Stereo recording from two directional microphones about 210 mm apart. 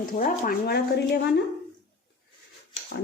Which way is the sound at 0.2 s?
40° left (ahead or behind).